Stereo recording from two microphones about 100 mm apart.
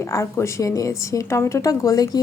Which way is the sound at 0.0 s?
30° left (ahead or behind).